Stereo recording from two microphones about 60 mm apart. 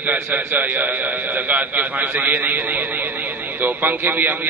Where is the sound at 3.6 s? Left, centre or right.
Right.